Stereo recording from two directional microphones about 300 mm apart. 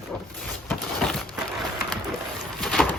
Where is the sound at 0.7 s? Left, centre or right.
Centre.